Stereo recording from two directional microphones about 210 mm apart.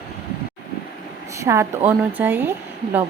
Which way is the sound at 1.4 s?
15° right (ahead or behind).